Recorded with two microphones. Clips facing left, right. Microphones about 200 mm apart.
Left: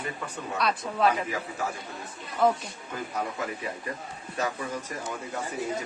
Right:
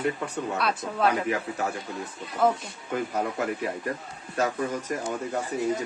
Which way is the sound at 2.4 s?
5° right (ahead or behind).